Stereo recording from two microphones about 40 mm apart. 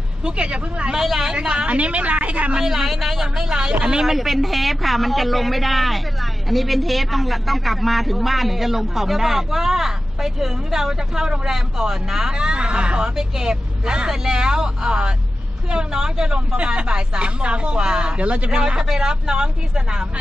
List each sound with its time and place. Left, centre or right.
0.2 s speech: right
0.9 s speech: centre
1.3 s speech: right
1.7 s a woman's voice: right
2.5 s speech: centre
4.0 s a man's voice: centre